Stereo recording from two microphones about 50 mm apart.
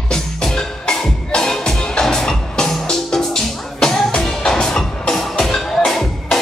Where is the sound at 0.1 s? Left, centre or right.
Centre.